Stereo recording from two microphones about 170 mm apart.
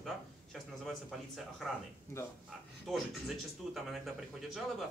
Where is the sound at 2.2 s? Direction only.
15° left (ahead or behind).